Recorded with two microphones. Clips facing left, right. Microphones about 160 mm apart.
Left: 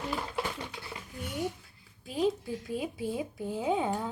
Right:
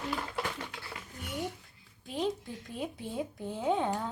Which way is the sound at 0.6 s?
15° left (ahead or behind).